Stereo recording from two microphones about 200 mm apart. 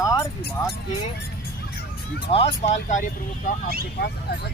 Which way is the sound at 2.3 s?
30° left (ahead or behind).